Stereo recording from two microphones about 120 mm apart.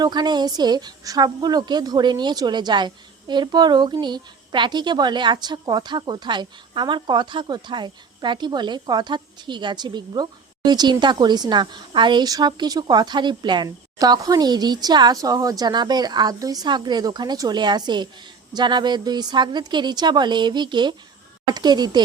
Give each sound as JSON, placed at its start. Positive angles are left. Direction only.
{"t": 0.0, "sound": "a woman's voice", "side_deg": -35}